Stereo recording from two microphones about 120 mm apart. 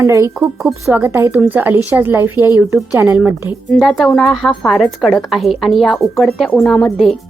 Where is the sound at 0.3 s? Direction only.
Centre (ahead or behind).